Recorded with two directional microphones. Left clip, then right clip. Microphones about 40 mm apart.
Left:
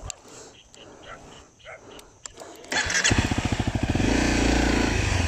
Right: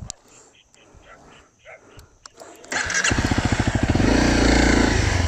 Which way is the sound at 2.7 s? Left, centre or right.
Right.